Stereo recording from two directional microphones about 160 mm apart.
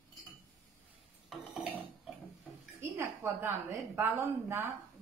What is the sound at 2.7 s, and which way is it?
A woman's voice, 15° right (ahead or behind).